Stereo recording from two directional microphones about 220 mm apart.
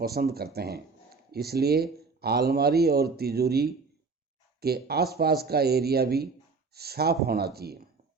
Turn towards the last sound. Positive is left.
turn(degrees=-45)  # may be behind; listen again after turning